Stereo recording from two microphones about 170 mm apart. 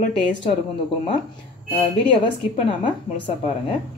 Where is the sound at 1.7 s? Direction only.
30° left (ahead or behind).